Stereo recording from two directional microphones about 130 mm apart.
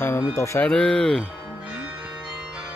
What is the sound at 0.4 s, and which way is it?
Music, 25° left (ahead or behind).